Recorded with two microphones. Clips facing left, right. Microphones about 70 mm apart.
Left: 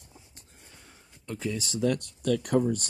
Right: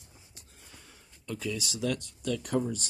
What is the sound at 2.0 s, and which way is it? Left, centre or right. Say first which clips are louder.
Speech: left 6 dB; left.